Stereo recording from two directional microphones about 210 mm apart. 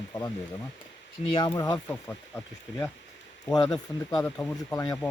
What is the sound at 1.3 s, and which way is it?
Speech, 20° left (ahead or behind).